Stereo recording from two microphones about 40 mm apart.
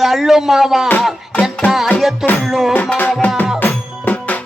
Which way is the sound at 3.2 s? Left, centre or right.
Left.